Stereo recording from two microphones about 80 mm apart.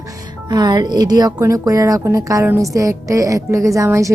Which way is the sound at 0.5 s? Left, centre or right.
Right.